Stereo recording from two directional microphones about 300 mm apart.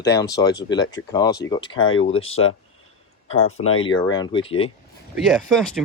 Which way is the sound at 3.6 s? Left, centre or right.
Left.